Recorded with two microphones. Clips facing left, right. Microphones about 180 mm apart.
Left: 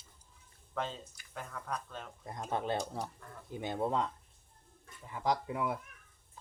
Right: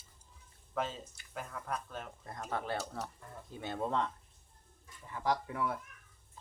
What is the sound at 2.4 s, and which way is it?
Speech, 20° left (ahead or behind).